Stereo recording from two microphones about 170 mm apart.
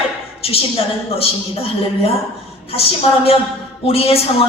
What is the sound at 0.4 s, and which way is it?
A woman's voice, 35° left (ahead or behind).